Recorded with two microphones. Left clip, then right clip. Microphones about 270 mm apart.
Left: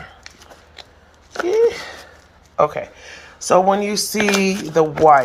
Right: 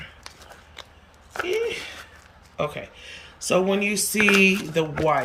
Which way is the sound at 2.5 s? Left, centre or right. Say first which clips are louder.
Left 11 dB; left.